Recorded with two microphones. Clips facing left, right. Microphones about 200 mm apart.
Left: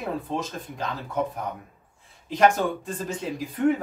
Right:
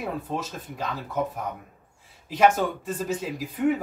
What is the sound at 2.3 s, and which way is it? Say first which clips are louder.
Speech: even; 5° right (ahead or behind).